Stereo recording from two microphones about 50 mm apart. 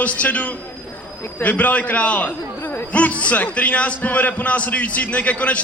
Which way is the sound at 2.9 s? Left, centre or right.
Left.